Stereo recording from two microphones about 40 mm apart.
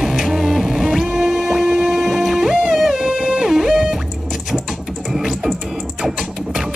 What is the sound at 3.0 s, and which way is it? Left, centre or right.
Music, right.